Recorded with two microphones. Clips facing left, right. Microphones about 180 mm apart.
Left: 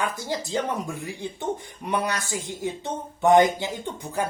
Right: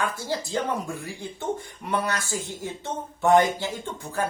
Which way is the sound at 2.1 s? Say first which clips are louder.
Even; 15° left (ahead or behind).